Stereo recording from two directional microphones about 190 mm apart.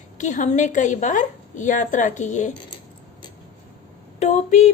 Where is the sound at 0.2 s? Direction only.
40° left (ahead or behind).